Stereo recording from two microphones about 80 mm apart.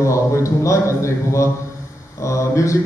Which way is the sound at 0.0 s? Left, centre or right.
Left.